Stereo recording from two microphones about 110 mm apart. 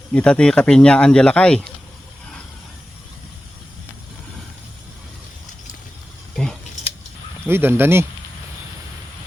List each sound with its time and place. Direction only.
0.1 s speech: 10° left (ahead or behind)
6.3 s a sound: 5° left (ahead or behind)
7.4 s speech: 20° right (ahead or behind)